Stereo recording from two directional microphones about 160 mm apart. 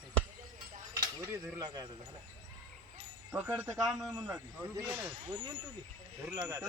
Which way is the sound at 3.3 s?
10° right (ahead or behind).